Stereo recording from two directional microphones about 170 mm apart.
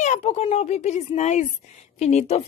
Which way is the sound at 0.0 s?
40° left (ahead or behind).